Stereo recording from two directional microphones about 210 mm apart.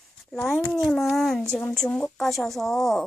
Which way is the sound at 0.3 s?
Centre (ahead or behind).